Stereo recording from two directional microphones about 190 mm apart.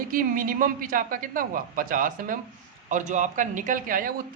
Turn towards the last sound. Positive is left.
turn(degrees=-45)  # may be behind; listen again after turning